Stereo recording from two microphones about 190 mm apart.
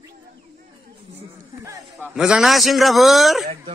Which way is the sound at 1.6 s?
15° right (ahead or behind).